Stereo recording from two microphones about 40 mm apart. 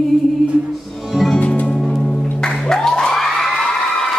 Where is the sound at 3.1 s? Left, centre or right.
Centre.